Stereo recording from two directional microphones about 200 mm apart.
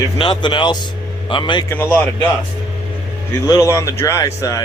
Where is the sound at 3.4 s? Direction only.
15° left (ahead or behind).